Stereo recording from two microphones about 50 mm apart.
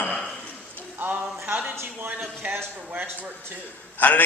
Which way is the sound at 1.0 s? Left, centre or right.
Right.